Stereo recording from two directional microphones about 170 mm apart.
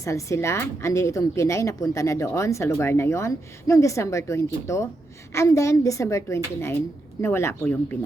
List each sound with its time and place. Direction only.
0.0 s a woman's voice: 20° left (ahead or behind)